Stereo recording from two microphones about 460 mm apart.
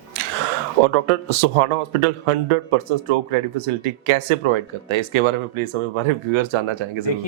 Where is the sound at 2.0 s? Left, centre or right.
Right.